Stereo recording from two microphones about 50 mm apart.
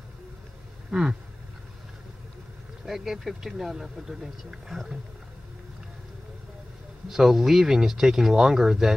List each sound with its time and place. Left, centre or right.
0.9 s vehicle: centre
2.8 s speech: centre
7.1 s speech: centre